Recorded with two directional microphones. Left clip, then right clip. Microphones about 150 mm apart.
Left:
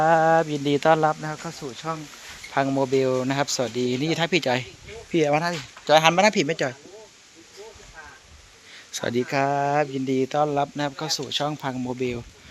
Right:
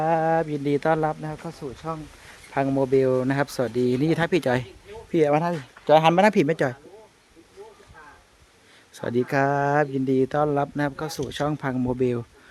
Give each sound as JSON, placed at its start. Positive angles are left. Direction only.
{"t": 0.0, "sound": "speech", "side_deg": 0}
{"t": 2.5, "sound": "speech", "side_deg": -30}
{"t": 8.9, "sound": "speech", "side_deg": -15}
{"t": 9.1, "sound": "speech", "side_deg": -40}